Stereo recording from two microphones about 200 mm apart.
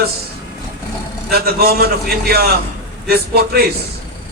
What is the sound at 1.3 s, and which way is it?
A man's voice, 50° right (ahead or behind).